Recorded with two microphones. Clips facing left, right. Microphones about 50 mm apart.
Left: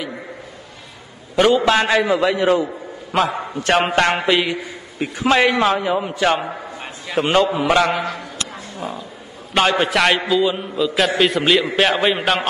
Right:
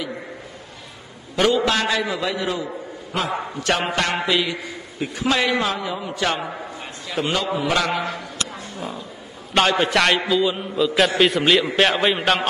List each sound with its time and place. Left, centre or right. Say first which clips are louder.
1.3 s a man's voice: left 4 dB; centre; by 7.9 s left
7.9 s a man's voice: left 2 dB; centre
9.5 s a man's voice: left 1 dB; centre